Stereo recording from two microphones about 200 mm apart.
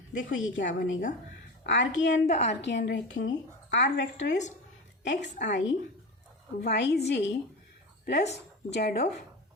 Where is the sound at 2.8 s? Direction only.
65° left (ahead or behind).